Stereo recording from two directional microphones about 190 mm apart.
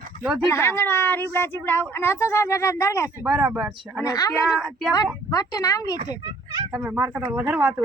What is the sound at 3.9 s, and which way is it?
Speech, 20° left (ahead or behind).